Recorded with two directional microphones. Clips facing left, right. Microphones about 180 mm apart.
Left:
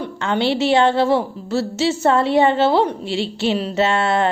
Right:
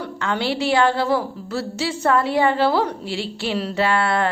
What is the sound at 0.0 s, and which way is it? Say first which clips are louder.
A woman's voice: left 4 dB; 25° left (ahead or behind).